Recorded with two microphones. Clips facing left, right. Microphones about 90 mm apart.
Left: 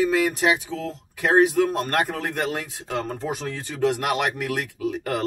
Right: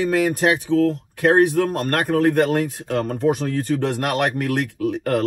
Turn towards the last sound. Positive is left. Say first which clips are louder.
# right 5 dB
turn(degrees=-50)  # may be behind; listen again after turning